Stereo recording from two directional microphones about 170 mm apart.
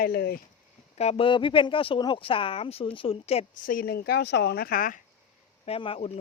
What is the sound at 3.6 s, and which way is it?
Speech, 55° left (ahead or behind).